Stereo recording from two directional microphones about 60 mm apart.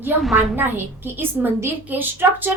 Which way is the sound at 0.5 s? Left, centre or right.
Right.